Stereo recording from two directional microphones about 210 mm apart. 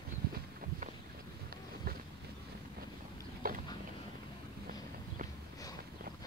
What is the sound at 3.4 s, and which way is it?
Boat, 45° right (ahead or behind).